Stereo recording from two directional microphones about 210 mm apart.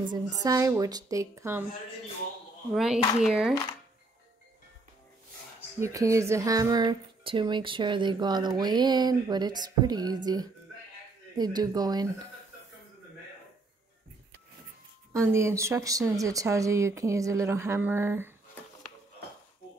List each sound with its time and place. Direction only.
0.4 s speech: 15° right (ahead or behind)
2.7 s speech: centre (ahead or behind)
5.8 s speech: 15° right (ahead or behind)
15.1 s speech: 15° right (ahead or behind)